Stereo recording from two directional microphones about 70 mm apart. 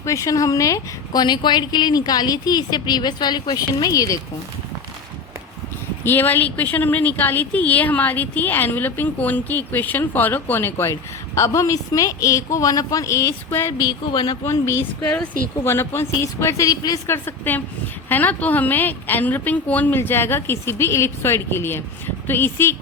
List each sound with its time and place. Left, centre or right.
0.0 s speech: left
1.2 s speech: left
6.1 s speech: left
11.3 s speech: left
13.5 s a woman's voice: left
13.7 s speech: left
14.4 s a woman's voice: left
15.1 s speech: left
15.6 s a woman's voice: left
16.6 s a woman's voice: left
17.1 s speech: left
20.0 s a woman's voice: left